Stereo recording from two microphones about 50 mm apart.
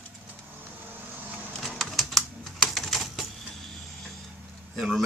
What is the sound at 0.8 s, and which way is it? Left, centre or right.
Vehicle, right.